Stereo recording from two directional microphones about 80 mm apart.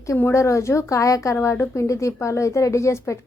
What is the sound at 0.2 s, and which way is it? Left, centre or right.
A woman's voice, left.